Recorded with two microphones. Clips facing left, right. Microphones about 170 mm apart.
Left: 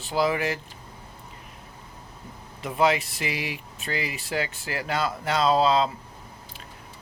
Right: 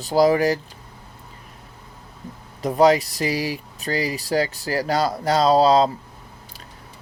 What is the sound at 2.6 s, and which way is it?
Speech, 40° right (ahead or behind).